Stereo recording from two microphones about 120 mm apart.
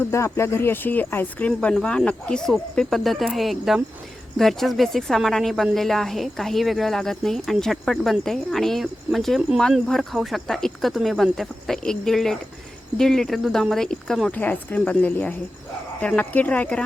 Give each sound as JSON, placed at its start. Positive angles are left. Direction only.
{"t": 0.3, "sound": "speech", "side_deg": 20}